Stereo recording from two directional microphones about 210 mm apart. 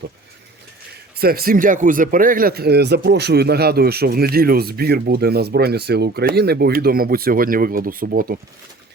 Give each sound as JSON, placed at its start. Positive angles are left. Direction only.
{"t": 1.1, "sound": "speech", "side_deg": -45}